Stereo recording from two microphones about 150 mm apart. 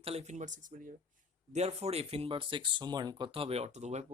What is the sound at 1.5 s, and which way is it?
Speech, 45° right (ahead or behind).